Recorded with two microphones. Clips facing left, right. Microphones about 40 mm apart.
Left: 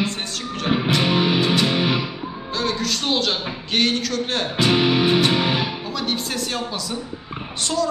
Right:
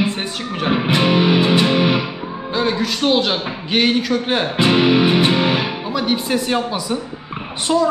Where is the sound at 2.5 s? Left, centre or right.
Centre.